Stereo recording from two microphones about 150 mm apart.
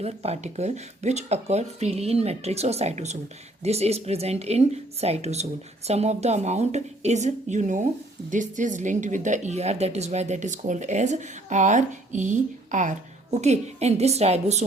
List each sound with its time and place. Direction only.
0.0 s a woman's voice: 45° right (ahead or behind)